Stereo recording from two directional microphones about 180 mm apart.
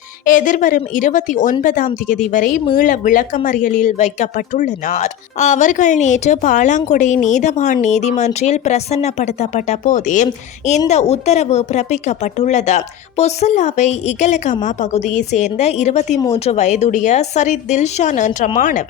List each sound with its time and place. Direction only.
0.3 s a woman's voice: 45° left (ahead or behind)